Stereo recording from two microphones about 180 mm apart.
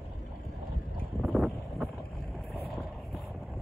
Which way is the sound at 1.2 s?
Centre (ahead or behind).